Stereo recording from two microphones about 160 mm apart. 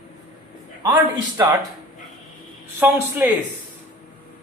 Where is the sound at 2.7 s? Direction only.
15° right (ahead or behind).